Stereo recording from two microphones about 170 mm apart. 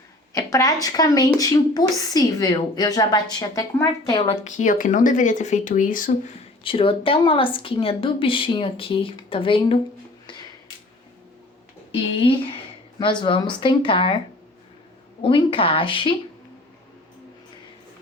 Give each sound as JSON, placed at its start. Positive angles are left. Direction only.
{"t": 0.3, "sound": "speech", "side_deg": 20}
{"t": 4.3, "sound": "speech", "side_deg": 45}
{"t": 6.7, "sound": "a woman's voice", "side_deg": 30}
{"t": 11.9, "sound": "a woman's voice", "side_deg": 35}
{"t": 15.2, "sound": "a woman's voice", "side_deg": 30}